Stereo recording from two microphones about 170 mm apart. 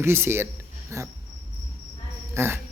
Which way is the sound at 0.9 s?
20° right (ahead or behind).